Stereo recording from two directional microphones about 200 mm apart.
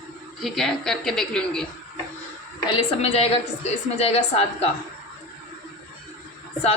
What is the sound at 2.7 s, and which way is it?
A woman's voice, 30° left (ahead or behind).